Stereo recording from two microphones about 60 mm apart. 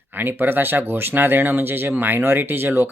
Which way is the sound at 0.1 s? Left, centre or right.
Right.